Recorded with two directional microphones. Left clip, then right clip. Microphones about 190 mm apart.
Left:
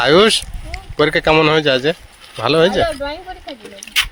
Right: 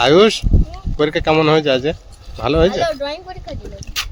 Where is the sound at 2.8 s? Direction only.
30° right (ahead or behind).